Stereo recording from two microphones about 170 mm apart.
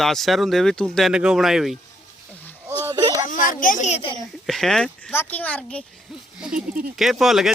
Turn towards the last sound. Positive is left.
turn(degrees=0)  # may be behind; listen again after turning